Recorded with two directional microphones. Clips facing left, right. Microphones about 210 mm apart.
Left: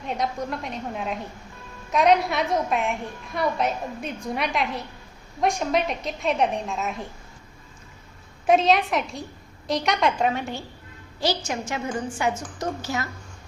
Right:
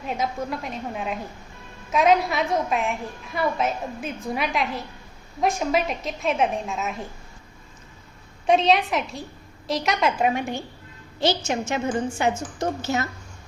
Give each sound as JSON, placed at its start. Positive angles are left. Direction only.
{"t": 0.0, "sound": "a woman's voice", "side_deg": -5}
{"t": 8.4, "sound": "a woman's voice", "side_deg": 0}
{"t": 11.2, "sound": "a woman's voice", "side_deg": -25}